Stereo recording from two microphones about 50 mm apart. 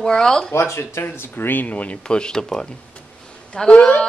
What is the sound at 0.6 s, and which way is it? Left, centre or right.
Speech, left.